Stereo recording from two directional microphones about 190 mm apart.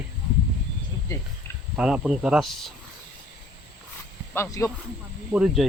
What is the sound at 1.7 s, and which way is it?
Speech, 5° right (ahead or behind).